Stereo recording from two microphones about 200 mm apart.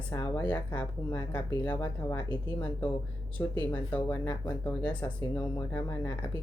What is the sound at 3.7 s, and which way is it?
Speech, 10° left (ahead or behind).